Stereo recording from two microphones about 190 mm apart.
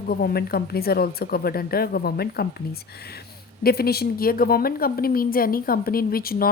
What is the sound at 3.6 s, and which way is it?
A woman's voice, 55° left (ahead or behind).